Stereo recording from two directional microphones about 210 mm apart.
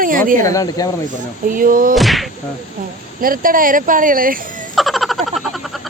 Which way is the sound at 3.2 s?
40° right (ahead or behind).